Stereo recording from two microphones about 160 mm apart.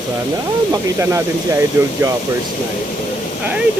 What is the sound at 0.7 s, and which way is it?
Speech, 15° right (ahead or behind).